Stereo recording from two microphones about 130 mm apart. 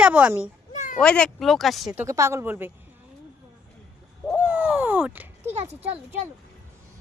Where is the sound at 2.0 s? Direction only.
25° right (ahead or behind).